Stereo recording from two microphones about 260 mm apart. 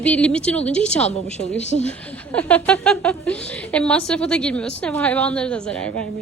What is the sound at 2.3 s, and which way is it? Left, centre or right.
Speech, centre.